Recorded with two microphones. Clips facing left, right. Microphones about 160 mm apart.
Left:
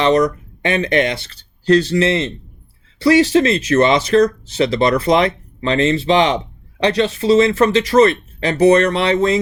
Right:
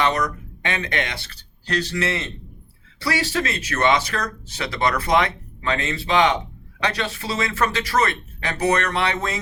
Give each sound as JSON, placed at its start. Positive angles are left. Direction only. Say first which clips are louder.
{"t": 0.0, "sound": "speech", "louder": "left 8 dB", "side_deg": 25}